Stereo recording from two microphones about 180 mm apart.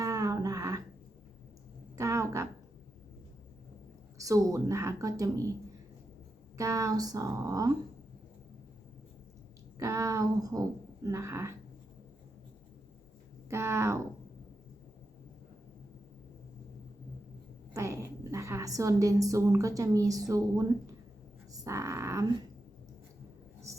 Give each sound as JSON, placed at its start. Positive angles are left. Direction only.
{"t": 0.0, "sound": "a sound", "side_deg": -15}
{"t": 2.0, "sound": "a sound", "side_deg": -15}
{"t": 4.2, "sound": "a woman's voice", "side_deg": -20}
{"t": 6.6, "sound": "speech", "side_deg": -15}
{"t": 9.7, "sound": "speech", "side_deg": -15}
{"t": 13.5, "sound": "a woman's voice", "side_deg": -15}
{"t": 17.7, "sound": "a woman's voice", "side_deg": -15}